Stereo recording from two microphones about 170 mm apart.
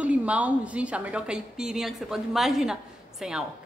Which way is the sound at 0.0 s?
10° right (ahead or behind).